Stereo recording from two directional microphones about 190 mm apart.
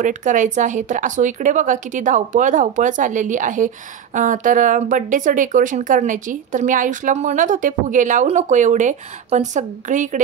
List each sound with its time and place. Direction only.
0.0 s speech: 40° right (ahead or behind)